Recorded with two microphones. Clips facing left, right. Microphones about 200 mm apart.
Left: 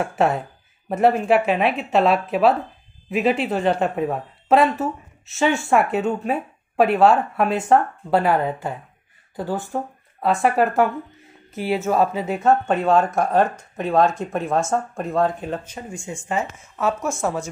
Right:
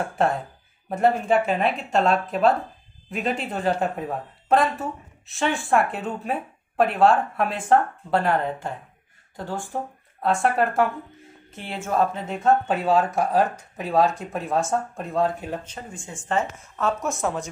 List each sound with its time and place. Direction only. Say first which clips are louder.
0.0 s speech: left 3 dB; 5° left (ahead or behind)
1.3 s a woman's voice: left 3 dB; 70° left (ahead or behind)
1.6 s speech: left 3 dB; 5° left (ahead or behind)